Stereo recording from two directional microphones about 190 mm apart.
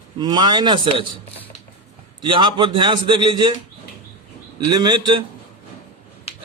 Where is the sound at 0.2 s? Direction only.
20° right (ahead or behind).